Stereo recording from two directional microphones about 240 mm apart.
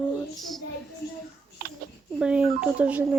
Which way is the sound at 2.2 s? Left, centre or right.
Centre.